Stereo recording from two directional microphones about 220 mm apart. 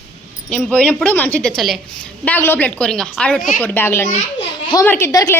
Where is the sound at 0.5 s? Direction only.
5° left (ahead or behind).